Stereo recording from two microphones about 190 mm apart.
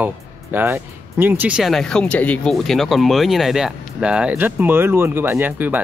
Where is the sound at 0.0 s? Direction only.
10° right (ahead or behind).